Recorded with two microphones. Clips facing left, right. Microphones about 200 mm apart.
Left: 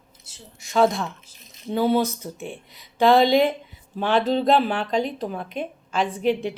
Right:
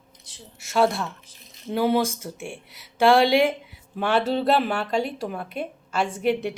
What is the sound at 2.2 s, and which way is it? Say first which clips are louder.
Speech: left 1 dB; 15° left (ahead or behind).